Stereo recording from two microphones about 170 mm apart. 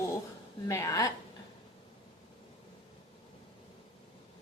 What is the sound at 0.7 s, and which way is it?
Speech, 20° left (ahead or behind).